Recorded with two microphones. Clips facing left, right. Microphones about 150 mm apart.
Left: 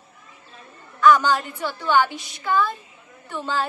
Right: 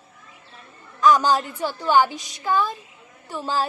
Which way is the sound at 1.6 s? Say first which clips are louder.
Right 2 dB; 15° right (ahead or behind).